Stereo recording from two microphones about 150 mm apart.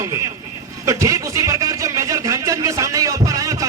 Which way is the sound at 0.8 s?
20° right (ahead or behind).